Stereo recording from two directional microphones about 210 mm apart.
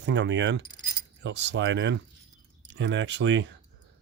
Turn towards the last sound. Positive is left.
turn(degrees=-60)  # may be behind; listen again after turning